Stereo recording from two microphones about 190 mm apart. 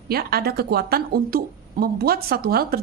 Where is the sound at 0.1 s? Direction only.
55° right (ahead or behind).